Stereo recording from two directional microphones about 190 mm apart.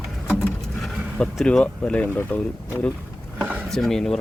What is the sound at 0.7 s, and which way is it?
Speech, centre (ahead or behind).